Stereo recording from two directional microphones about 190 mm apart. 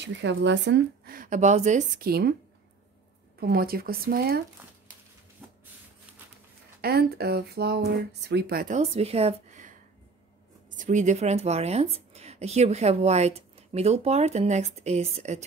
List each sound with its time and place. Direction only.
0.0 s speech: 70° right (ahead or behind)
1.1 s speech: 45° right (ahead or behind)
3.3 s speech: 55° right (ahead or behind)
6.8 s speech: 55° right (ahead or behind)
10.8 s speech: 40° right (ahead or behind)